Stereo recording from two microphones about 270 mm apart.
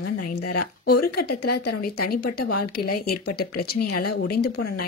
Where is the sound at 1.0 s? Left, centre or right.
Left.